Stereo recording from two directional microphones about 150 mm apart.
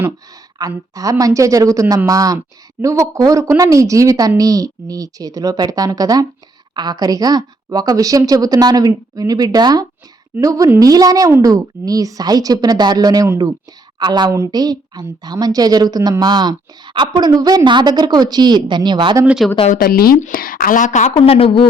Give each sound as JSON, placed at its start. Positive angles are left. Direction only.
{"t": 0.6, "sound": "a woman's voice", "side_deg": -25}
{"t": 19.2, "sound": "speech", "side_deg": -5}
{"t": 19.7, "sound": "speech", "side_deg": 85}
{"t": 20.1, "sound": "a woman's voice", "side_deg": 65}